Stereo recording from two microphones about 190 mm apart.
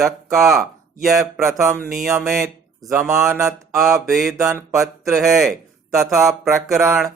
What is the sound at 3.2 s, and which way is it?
Mantra, 15° right (ahead or behind).